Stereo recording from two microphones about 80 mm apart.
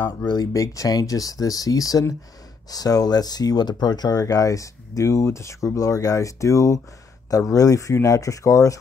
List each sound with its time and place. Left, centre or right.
0.3 s speech: left